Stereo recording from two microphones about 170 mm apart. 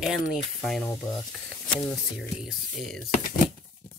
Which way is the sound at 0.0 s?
Centre (ahead or behind).